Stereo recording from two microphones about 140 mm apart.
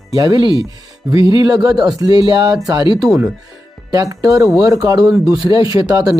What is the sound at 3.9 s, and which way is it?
Speech, 25° right (ahead or behind).